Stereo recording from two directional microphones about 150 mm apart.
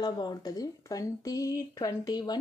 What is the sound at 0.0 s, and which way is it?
Speech, 30° left (ahead or behind).